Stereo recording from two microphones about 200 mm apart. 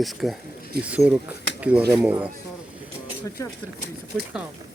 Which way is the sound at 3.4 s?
15° left (ahead or behind).